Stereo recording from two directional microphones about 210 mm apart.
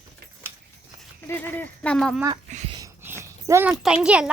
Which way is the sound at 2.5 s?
35° right (ahead or behind).